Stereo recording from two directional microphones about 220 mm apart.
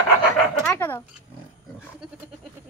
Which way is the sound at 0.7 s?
10° left (ahead or behind).